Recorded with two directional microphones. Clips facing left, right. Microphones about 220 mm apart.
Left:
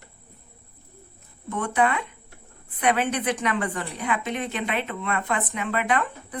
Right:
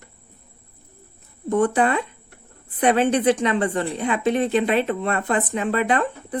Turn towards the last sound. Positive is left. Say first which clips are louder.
# right 4 dB
turn(degrees=-30)  # may be behind; listen again after turning